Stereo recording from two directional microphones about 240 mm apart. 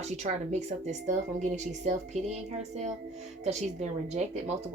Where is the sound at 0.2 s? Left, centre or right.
Right.